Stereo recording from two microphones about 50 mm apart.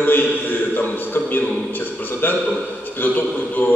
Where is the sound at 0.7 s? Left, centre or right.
Left.